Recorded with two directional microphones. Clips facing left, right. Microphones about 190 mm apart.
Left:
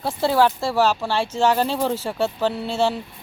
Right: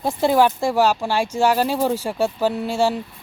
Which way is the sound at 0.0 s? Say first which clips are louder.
Right 2 dB; 15° right (ahead or behind).